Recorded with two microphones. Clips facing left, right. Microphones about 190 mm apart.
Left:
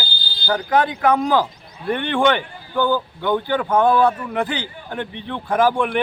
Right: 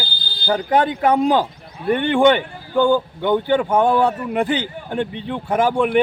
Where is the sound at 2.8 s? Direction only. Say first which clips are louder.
Right 4 dB; 25° right (ahead or behind).